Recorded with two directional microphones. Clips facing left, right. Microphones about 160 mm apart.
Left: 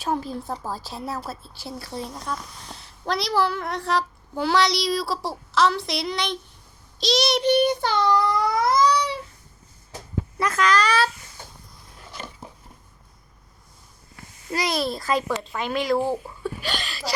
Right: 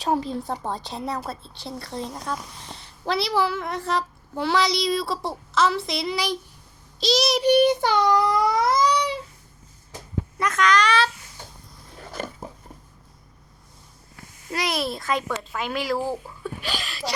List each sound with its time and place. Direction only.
0.0 s a child's voice: centre (ahead or behind)
7.4 s a sound: 15° right (ahead or behind)
10.3 s speech: 5° left (ahead or behind)
14.5 s a child's voice: centre (ahead or behind)
16.0 s speech: 20° left (ahead or behind)
16.4 s speech: centre (ahead or behind)